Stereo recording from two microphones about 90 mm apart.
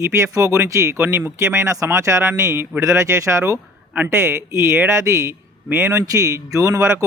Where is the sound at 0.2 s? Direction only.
35° right (ahead or behind).